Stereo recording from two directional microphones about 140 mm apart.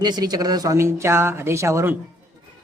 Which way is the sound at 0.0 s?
30° right (ahead or behind).